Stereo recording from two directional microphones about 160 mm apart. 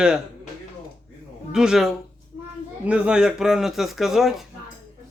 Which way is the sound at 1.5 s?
5° right (ahead or behind).